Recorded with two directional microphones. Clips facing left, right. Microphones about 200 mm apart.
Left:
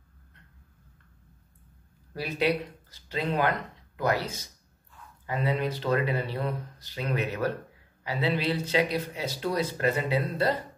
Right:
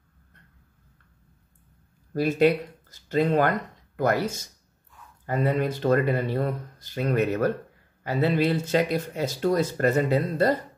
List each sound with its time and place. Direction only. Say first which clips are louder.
2.1 s speech: right 7 dB; 45° right (ahead or behind)